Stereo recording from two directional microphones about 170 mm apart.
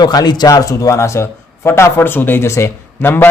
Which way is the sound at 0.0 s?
25° left (ahead or behind).